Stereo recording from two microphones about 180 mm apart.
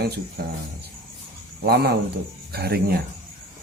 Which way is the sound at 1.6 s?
60° right (ahead or behind).